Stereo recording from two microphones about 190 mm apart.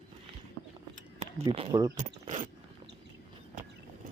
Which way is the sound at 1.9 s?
40° right (ahead or behind).